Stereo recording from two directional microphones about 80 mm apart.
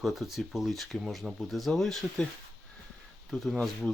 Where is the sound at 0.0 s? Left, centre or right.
Centre.